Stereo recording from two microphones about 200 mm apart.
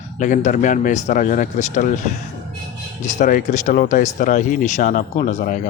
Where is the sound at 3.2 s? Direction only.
40° left (ahead or behind).